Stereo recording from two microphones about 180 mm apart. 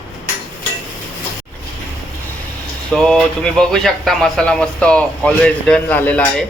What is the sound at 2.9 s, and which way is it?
A man's voice, 5° left (ahead or behind).